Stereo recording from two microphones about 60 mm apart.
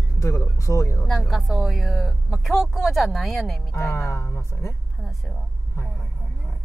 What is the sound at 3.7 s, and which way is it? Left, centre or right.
Speech, left.